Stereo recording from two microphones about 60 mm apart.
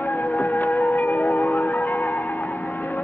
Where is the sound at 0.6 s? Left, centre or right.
Left.